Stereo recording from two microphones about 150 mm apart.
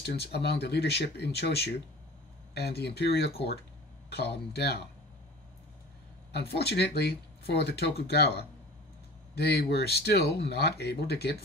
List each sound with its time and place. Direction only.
0.0 s speech: 90° left
6.3 s speech: 90° left